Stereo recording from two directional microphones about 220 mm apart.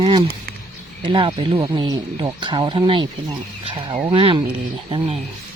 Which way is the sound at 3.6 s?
20° right (ahead or behind).